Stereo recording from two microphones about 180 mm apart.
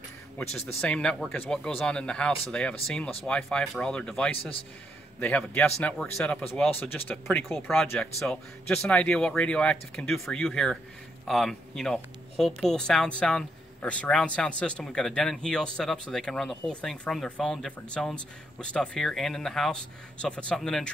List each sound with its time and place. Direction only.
0.4 s speech: 5° left (ahead or behind)
4.4 s a man's voice: 30° left (ahead or behind)
5.2 s speech: 10° left (ahead or behind)